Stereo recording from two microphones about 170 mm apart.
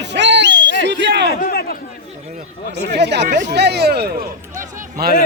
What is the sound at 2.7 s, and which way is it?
Speech, 80° right.